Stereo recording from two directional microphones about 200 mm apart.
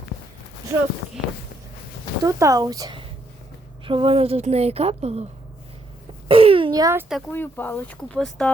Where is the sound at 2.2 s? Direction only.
15° right (ahead or behind); by 5.2 s 30° right (ahead or behind).